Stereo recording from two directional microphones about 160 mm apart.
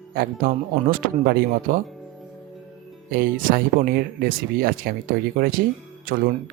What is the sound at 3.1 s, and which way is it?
Speech, 60° right (ahead or behind).